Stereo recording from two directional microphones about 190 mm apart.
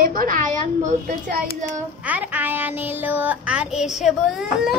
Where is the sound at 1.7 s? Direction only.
10° right (ahead or behind).